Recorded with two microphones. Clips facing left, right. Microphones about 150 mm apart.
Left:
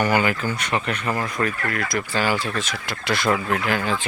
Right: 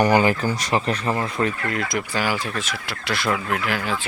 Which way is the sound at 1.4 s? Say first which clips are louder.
Right 1 dB; 20° right (ahead or behind).